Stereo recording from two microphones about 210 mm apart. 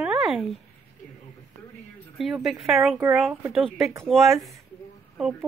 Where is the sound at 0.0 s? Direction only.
5° right (ahead or behind).